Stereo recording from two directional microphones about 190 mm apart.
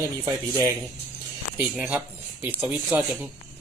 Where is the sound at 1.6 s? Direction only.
5° right (ahead or behind).